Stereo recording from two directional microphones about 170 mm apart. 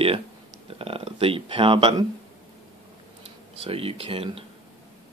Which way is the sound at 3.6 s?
35° right (ahead or behind).